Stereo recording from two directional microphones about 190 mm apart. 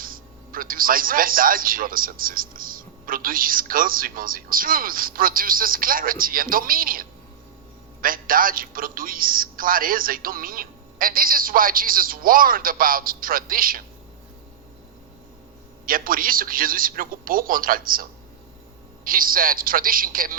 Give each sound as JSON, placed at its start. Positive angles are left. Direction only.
{"t": 0.0, "sound": "a man's voice", "side_deg": -50}
{"t": 15.9, "sound": "a man's voice", "side_deg": -50}